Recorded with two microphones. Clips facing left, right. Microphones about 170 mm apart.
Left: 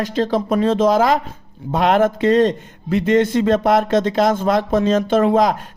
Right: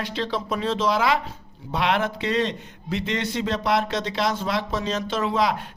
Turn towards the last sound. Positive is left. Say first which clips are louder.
# left 8 dB
turn(degrees=45)  # may be behind; listen again after turning